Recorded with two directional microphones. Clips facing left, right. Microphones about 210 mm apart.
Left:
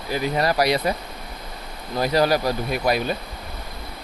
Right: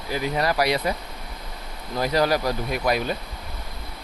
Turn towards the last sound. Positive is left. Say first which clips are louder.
# left 2 dB
turn(degrees=30)  # may be behind; listen again after turning